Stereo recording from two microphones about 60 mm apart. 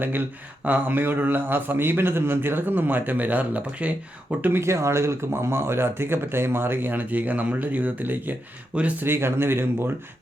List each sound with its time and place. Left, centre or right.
0.0 s speech: right
4.6 s speech: right
9.0 s speech: right